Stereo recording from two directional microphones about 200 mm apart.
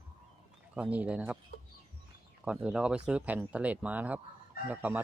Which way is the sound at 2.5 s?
5° right (ahead or behind).